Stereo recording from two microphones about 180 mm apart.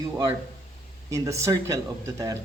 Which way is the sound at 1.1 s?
15° right (ahead or behind).